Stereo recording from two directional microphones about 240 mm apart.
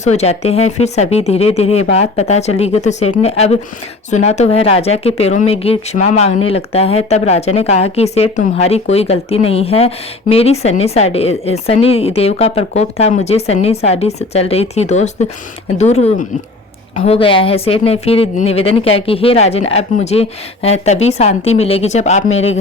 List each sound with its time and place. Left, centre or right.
0.0 s speech: left